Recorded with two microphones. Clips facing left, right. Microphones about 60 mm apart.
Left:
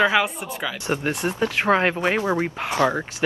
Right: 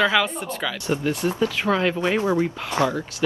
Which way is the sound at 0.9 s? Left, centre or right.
Left.